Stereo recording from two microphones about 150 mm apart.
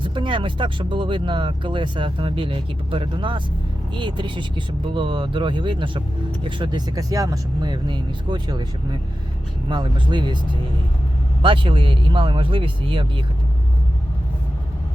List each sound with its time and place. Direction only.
0.0 s speech: 35° right (ahead or behind)
11.4 s speech: 35° right (ahead or behind)